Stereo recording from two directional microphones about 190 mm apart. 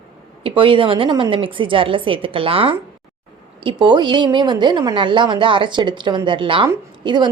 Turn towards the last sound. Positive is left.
turn(degrees=-25)  # may be behind; listen again after turning